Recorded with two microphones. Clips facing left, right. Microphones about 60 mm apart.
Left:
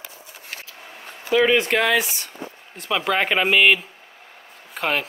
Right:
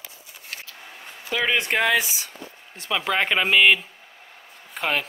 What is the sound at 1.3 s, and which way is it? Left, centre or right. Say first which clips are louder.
A man's voice: left 5 dB; centre.